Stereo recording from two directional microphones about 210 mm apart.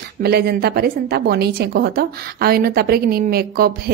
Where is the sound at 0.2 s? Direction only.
45° right (ahead or behind).